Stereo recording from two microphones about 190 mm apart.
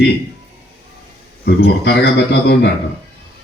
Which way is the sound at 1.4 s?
60° left (ahead or behind).